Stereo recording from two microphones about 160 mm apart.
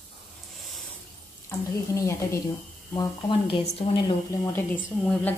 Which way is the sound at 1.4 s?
15° left (ahead or behind).